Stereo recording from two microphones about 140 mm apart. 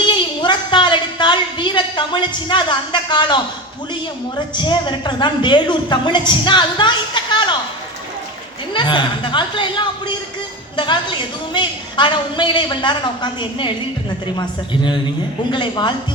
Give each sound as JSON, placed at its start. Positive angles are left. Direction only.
{"t": 0.1, "sound": "a sound", "side_deg": 35}
{"t": 4.5, "sound": "a woman's voice", "side_deg": 35}
{"t": 8.7, "sound": "a woman's voice", "side_deg": 35}